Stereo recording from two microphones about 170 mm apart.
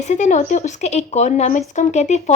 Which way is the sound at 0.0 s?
45° left (ahead or behind).